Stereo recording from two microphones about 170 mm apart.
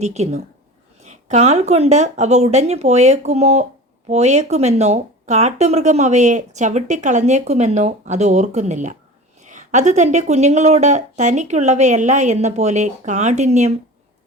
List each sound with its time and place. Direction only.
0.0 s speech: 40° right (ahead or behind)